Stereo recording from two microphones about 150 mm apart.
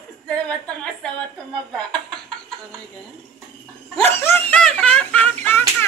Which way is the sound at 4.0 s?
15° left (ahead or behind).